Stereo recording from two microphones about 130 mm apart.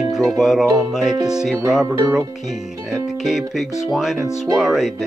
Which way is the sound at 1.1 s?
30° right (ahead or behind).